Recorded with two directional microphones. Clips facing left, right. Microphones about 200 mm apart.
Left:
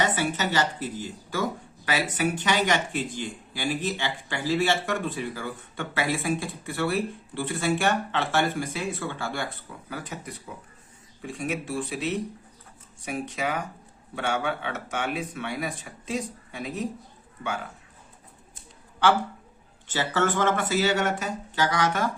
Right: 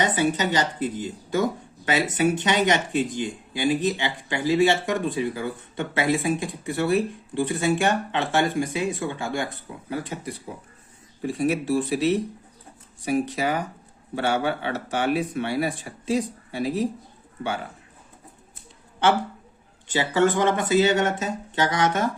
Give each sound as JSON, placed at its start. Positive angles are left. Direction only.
{"t": 0.0, "sound": "speech", "side_deg": -20}
{"t": 19.9, "sound": "speech", "side_deg": -15}